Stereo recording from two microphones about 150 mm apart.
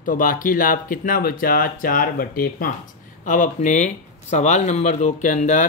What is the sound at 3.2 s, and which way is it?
Speech, 55° left (ahead or behind).